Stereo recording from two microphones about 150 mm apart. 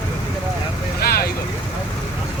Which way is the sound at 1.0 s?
90° left.